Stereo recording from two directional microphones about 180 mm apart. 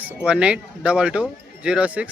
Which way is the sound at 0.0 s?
5° right (ahead or behind).